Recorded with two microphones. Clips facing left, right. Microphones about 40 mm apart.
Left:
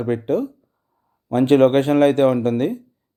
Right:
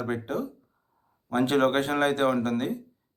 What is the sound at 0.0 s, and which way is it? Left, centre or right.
Speech, left.